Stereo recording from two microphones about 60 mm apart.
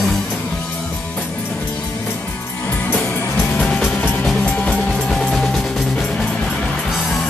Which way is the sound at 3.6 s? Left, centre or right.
Centre.